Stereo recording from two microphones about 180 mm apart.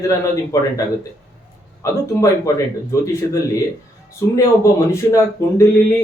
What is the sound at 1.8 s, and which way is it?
Speech, 20° left (ahead or behind).